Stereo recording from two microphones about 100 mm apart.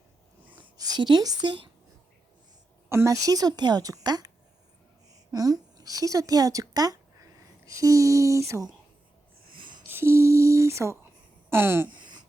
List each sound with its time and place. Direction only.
0.8 s a woman's voice: 45° right (ahead or behind)
2.9 s a woman's voice: 30° right (ahead or behind)
5.3 s a woman's voice: 40° right (ahead or behind)
9.9 s speech: 25° right (ahead or behind)
11.4 s a sound: 25° right (ahead or behind)
11.9 s a sound: 50° right (ahead or behind)